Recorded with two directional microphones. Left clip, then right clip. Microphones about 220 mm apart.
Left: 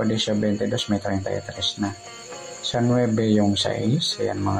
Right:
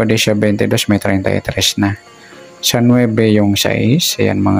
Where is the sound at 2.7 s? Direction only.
35° right (ahead or behind).